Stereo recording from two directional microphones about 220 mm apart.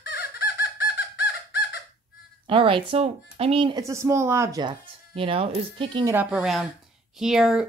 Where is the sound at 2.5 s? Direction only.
25° right (ahead or behind).